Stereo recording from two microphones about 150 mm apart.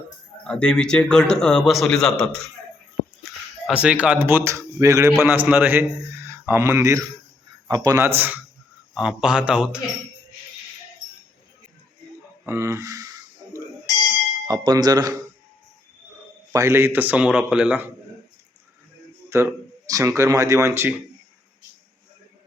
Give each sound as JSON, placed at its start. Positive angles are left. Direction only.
{"t": 0.4, "sound": "a man's voice", "side_deg": 5}
{"t": 3.7, "sound": "a man's voice", "side_deg": -10}
{"t": 12.5, "sound": "speech", "side_deg": -20}
{"t": 14.4, "sound": "speech", "side_deg": -25}
{"t": 16.5, "sound": "a man's voice", "side_deg": -20}
{"t": 19.3, "sound": "speech", "side_deg": -20}